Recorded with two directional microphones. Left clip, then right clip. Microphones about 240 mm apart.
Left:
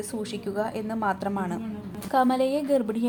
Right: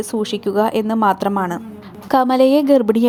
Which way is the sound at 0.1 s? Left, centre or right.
Right.